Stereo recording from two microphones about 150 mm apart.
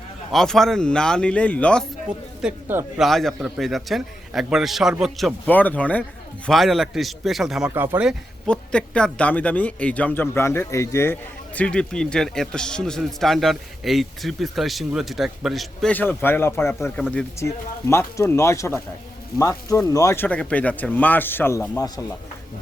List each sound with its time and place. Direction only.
0.3 s speech: centre (ahead or behind)
2.4 s speech: 5° right (ahead or behind)
5.5 s speech: 10° left (ahead or behind); by 8.1 s 10° right (ahead or behind)
8.4 s speech: 5° left (ahead or behind)
15.9 s speech: 15° left (ahead or behind)
20.2 s speech: 10° left (ahead or behind); by 22.0 s 25° left (ahead or behind)